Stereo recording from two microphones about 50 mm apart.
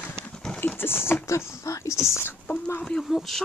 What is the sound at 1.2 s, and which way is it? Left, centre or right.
Speech, left.